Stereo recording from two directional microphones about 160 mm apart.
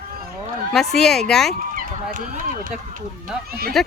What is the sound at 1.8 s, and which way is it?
Run, 60° right (ahead or behind).